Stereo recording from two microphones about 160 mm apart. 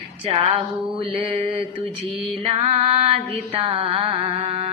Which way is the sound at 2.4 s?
40° right (ahead or behind).